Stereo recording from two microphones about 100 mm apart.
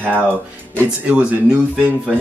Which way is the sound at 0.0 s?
20° right (ahead or behind).